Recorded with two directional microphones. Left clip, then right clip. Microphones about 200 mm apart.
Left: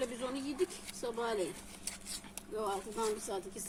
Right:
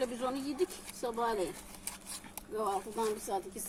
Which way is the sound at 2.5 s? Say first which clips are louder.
Right 3 dB; 10° right (ahead or behind).